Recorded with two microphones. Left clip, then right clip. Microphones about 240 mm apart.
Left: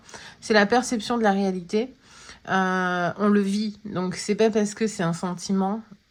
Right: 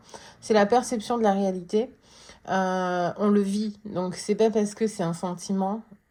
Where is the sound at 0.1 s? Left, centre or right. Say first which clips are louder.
Left 2 dB; left.